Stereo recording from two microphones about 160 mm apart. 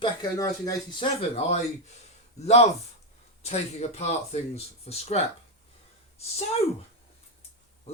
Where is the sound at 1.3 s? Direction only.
40° left (ahead or behind).